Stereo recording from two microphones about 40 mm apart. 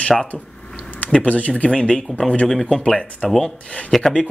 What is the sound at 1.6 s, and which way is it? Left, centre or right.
Speech, left.